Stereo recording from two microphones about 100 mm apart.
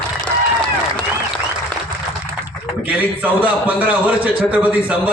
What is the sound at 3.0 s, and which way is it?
A man's voice, 15° right (ahead or behind).